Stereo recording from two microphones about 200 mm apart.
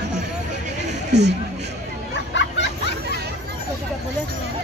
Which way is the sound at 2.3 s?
65° left (ahead or behind).